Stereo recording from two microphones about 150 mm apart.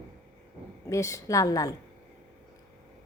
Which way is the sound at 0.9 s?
20° left (ahead or behind).